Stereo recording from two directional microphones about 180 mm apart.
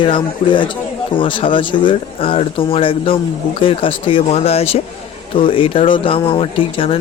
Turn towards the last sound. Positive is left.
turn(degrees=30)  # may be behind; listen again after turning